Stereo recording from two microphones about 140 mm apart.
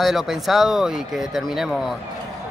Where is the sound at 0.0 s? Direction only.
Centre (ahead or behind).